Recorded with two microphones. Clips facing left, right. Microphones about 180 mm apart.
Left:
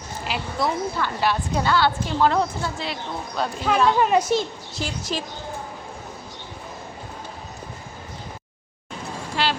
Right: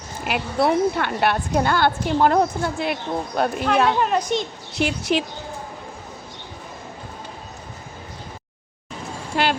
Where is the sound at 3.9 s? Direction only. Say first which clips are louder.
Left 2 dB; 5° left (ahead or behind).